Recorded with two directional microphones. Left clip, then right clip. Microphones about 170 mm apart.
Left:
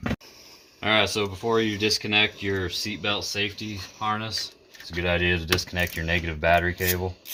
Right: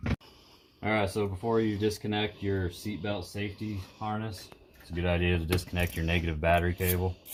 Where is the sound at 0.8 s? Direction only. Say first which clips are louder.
Left 7 dB; 25° left (ahead or behind).